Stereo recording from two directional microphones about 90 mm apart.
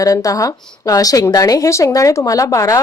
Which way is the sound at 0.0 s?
40° left (ahead or behind).